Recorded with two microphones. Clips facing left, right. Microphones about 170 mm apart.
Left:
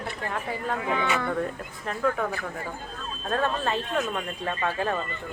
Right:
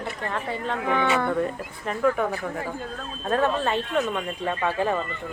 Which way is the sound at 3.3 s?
5° right (ahead or behind).